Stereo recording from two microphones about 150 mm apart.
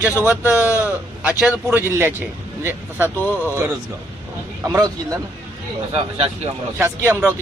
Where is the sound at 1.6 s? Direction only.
15° right (ahead or behind).